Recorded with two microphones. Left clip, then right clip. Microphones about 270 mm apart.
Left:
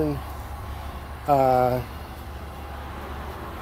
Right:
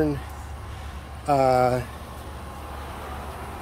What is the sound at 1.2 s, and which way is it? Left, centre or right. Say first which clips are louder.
Speech: even; centre.